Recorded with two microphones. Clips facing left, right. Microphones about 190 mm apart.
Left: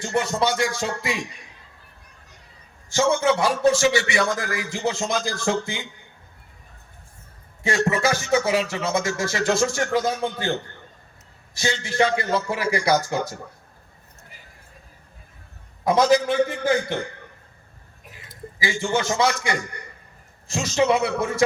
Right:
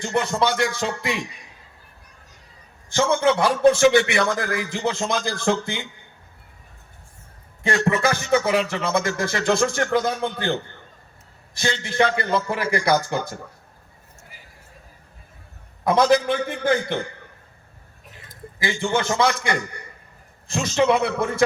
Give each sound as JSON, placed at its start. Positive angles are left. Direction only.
{"t": 0.0, "sound": "a man's voice", "side_deg": -60}
{"t": 2.9, "sound": "a man's voice", "side_deg": -60}
{"t": 7.6, "sound": "a man's voice", "side_deg": -55}
{"t": 15.8, "sound": "a man's voice", "side_deg": -55}
{"t": 18.6, "sound": "a man's voice", "side_deg": -60}